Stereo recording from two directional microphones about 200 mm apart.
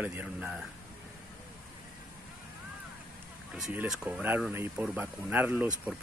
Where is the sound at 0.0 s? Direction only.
10° right (ahead or behind).